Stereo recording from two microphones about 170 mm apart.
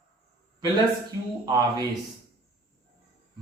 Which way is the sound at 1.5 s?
20° right (ahead or behind).